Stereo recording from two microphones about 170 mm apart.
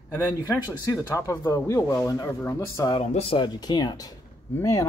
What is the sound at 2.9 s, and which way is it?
Speech, 30° left (ahead or behind).